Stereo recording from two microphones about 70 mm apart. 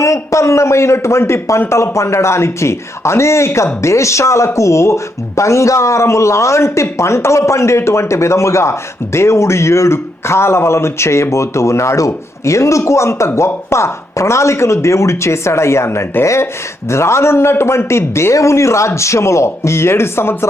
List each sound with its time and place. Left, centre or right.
0.0 s a man's voice: left